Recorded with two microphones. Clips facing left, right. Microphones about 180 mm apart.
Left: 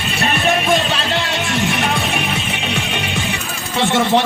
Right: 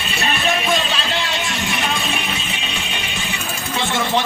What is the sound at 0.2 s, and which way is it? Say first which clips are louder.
Music: left 3 dB; 50° left (ahead or behind).